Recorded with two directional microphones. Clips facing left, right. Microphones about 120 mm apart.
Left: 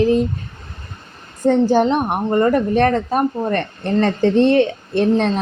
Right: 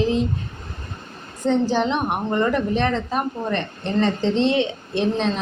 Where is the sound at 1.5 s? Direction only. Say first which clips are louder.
Left 5 dB; 45° left (ahead or behind).